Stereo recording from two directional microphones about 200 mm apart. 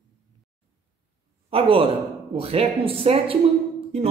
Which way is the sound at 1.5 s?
25° right (ahead or behind).